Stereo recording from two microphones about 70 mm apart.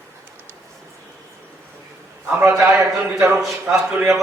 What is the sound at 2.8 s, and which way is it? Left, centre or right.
Speech, right.